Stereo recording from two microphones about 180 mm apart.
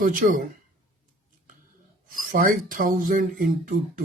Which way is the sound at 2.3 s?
50° right (ahead or behind).